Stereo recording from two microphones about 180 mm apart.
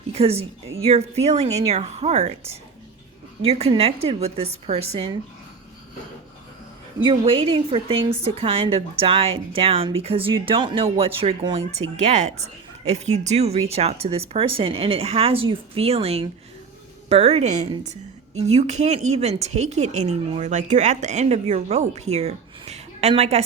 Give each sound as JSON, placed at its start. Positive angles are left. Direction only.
{"t": 0.1, "sound": "a woman's voice", "side_deg": -35}
{"t": 3.4, "sound": "a woman's voice", "side_deg": -35}
{"t": 7.0, "sound": "a woman's voice", "side_deg": -30}